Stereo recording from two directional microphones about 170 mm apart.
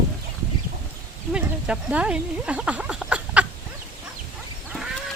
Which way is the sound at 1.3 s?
5° right (ahead or behind).